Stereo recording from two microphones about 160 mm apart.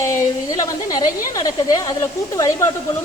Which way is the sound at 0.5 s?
25° left (ahead or behind).